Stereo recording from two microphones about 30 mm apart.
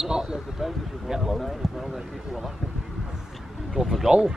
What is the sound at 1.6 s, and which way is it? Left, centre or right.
Speech, centre.